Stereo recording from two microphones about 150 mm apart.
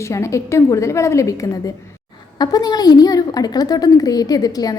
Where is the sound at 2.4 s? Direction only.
25° left (ahead or behind).